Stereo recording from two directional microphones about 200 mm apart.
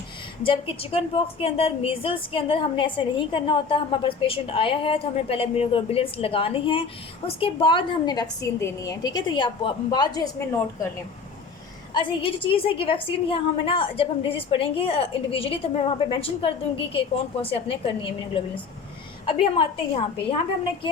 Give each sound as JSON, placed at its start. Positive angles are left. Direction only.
{"t": 0.4, "sound": "a woman's voice", "side_deg": 25}
{"t": 11.9, "sound": "a woman's voice", "side_deg": 25}